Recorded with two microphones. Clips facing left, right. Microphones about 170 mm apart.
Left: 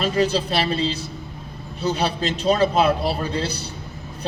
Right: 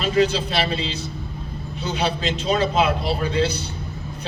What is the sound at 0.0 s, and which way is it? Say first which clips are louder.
A man's voice: right 1 dB; 40° left (ahead or behind).